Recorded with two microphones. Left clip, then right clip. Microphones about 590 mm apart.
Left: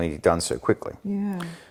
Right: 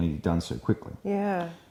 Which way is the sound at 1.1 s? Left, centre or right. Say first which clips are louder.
Right 7 dB; right.